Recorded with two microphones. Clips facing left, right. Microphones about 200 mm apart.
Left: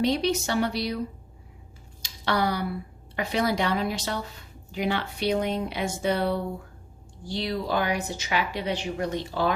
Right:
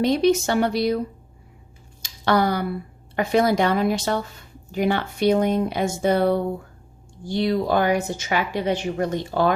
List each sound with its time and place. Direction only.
0.0 s a woman's voice: 50° right (ahead or behind)
2.0 s a sound: 50° right (ahead or behind)
3.2 s a woman's voice: 50° right (ahead or behind)